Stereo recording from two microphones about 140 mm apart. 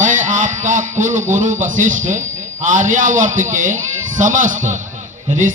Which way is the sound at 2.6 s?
65° right (ahead or behind).